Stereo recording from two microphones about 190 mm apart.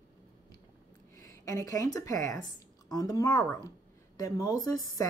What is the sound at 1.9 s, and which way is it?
A woman's voice, 15° left (ahead or behind).